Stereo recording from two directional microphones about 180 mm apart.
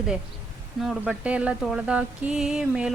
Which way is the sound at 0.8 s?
5° right (ahead or behind).